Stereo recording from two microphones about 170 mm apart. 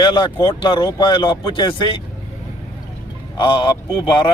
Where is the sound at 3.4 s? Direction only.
25° left (ahead or behind).